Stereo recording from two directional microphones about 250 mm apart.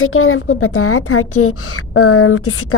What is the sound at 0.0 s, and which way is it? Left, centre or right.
A woman's voice, left.